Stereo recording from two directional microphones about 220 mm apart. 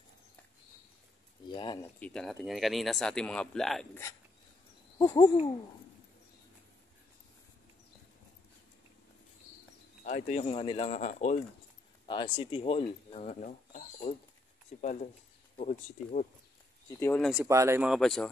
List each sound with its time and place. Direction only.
1.5 s a sound: 20° left (ahead or behind)
2.0 s speech: 5° left (ahead or behind)
4.9 s owl: 20° left (ahead or behind)
10.0 s speech: 35° left (ahead or behind)
10.4 s speech: 25° left (ahead or behind)
17.0 s speech: 10° left (ahead or behind)
17.3 s speech: 10° right (ahead or behind)